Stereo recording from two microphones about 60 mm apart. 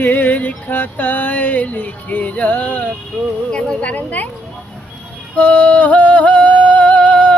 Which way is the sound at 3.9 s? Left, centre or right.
Left.